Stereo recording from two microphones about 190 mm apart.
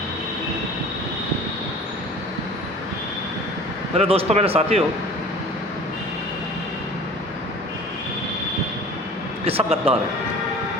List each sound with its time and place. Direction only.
3.9 s a man's voice: 30° right (ahead or behind)
9.4 s a man's voice: 30° right (ahead or behind)